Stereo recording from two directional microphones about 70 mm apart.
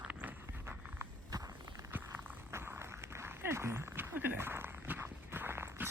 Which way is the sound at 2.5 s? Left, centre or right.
Right.